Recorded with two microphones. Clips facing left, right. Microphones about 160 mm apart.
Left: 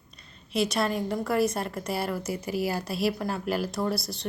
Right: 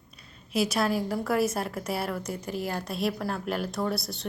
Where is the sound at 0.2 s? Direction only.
5° right (ahead or behind).